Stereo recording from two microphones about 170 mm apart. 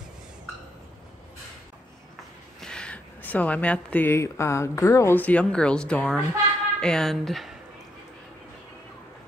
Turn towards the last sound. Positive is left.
turn(degrees=0)  # may be behind; listen again after turning